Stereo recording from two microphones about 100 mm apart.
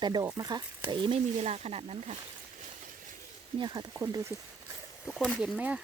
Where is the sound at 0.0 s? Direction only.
45° right (ahead or behind); by 2.1 s 90° right.